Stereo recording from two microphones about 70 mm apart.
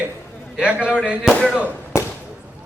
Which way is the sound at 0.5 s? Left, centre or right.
Centre.